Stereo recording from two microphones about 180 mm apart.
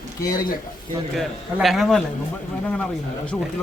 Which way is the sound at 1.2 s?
Centre (ahead or behind).